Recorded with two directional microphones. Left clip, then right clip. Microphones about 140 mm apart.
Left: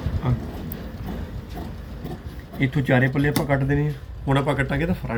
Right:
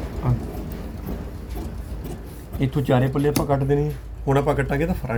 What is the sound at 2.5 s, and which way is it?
Speech, 20° right (ahead or behind).